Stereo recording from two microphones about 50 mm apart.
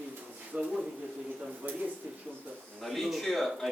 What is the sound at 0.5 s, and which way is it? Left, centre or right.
Speech, right.